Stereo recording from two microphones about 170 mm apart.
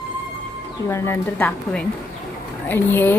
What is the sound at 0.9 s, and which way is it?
A woman's voice, 15° left (ahead or behind).